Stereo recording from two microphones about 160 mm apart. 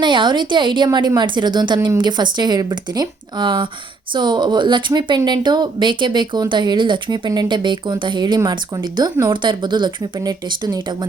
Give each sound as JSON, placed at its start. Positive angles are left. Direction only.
{"t": 0.0, "sound": "speech", "side_deg": -30}